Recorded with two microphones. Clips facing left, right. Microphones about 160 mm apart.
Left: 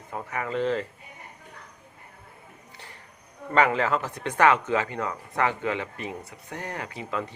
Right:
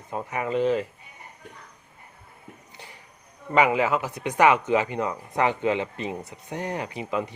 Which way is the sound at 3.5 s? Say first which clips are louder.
Right 2 dB; 10° right (ahead or behind).